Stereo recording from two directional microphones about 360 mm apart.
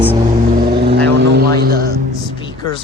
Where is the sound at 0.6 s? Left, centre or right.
Right.